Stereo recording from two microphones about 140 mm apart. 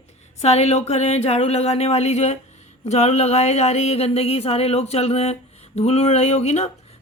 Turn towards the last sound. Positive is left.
turn(degrees=50)  # may be behind; listen again after turning